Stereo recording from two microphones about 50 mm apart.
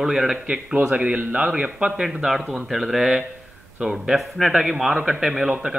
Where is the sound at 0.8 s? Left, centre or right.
Right.